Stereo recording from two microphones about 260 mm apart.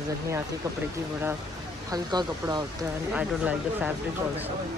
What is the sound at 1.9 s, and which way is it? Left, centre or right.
Speech, centre.